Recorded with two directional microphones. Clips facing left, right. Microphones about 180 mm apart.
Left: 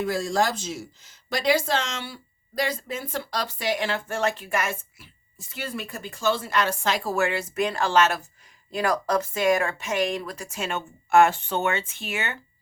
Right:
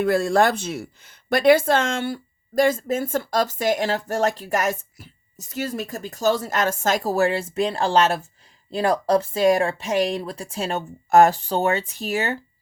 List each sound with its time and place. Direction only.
0.0 s speech: 60° right (ahead or behind); by 12.4 s 35° right (ahead or behind)